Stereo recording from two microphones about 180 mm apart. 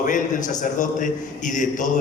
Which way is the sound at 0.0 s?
45° left (ahead or behind).